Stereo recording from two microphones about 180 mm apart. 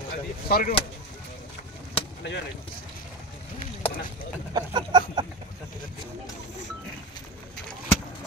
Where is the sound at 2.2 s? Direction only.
80° left.